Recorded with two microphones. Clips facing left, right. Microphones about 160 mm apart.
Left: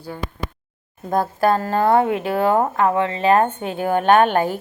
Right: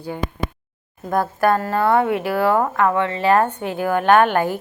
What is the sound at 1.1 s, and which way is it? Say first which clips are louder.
Speech: even; 25° left (ahead or behind).